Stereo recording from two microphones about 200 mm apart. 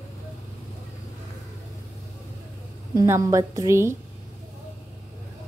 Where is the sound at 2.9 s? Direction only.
15° right (ahead or behind).